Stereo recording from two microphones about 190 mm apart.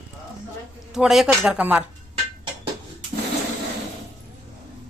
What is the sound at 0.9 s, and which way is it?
Speech, centre (ahead or behind).